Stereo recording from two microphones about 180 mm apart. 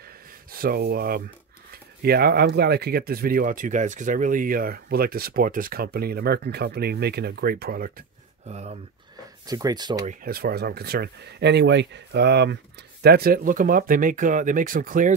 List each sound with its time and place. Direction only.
0.5 s speech: 55° right (ahead or behind)
8.5 s speech: 35° right (ahead or behind)
9.5 s speech: 20° right (ahead or behind)
10.0 s speech: 55° right (ahead or behind)